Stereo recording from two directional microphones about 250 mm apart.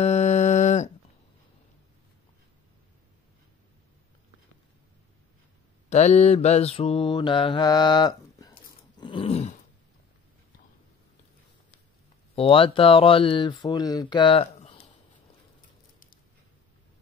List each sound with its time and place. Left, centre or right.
0.0 s a sound: left
5.9 s mantra: left
12.4 s speech: left